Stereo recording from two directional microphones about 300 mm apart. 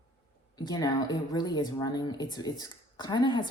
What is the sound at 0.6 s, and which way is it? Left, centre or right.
Speech, centre.